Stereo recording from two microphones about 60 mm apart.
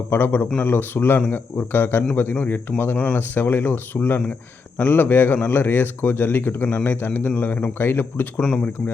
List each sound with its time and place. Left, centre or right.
0.1 s a man's voice: left
8.4 s speech: centre